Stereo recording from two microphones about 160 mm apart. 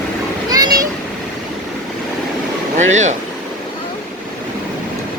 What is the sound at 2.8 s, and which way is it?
Speech, 50° right (ahead or behind).